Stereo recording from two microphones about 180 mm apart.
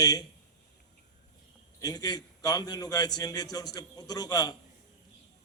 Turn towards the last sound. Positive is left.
turn(degrees=20)  # may be behind; listen again after turning